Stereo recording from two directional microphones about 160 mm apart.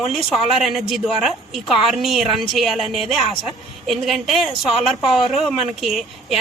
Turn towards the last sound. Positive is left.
turn(degrees=0)  # may be behind; listen again after turning